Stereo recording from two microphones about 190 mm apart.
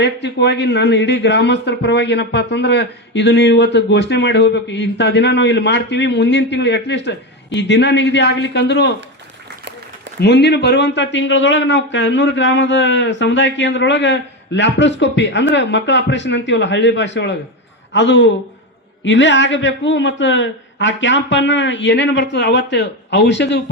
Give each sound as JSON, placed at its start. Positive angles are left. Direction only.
{"t": 0.0, "sound": "a man's voice", "side_deg": 65}
{"t": 10.2, "sound": "a man's voice", "side_deg": 65}